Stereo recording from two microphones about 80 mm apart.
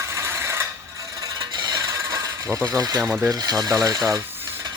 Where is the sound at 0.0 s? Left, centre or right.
Right.